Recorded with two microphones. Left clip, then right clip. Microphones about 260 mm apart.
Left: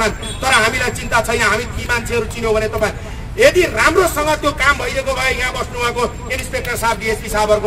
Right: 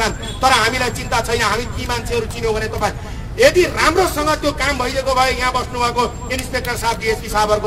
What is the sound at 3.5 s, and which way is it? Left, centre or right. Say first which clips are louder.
Speech: left 1 dB; left.